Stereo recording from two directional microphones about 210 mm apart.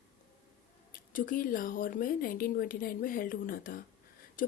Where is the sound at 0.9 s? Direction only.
40° left (ahead or behind).